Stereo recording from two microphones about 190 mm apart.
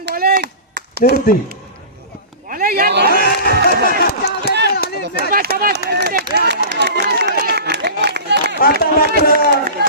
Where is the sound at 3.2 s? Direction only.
55° left (ahead or behind).